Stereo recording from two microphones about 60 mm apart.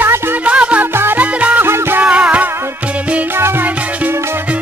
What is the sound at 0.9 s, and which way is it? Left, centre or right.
Music, right.